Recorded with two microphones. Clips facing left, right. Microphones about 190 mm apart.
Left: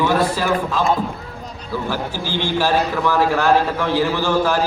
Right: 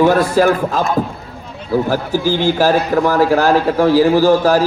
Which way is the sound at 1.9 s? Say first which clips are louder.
Right 8 dB; 45° right (ahead or behind).